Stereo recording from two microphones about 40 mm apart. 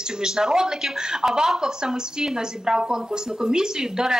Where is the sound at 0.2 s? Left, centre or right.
Centre.